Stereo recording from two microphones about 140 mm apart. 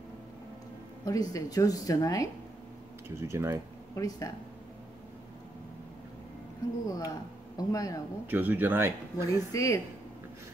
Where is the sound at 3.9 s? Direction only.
25° left (ahead or behind).